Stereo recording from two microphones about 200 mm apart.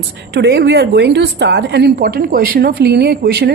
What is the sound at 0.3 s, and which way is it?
A woman's voice, 60° right (ahead or behind).